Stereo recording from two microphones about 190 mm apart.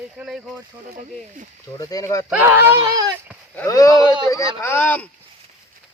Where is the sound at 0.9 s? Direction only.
40° right (ahead or behind).